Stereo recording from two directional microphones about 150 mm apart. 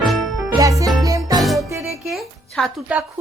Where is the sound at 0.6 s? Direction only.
20° right (ahead or behind).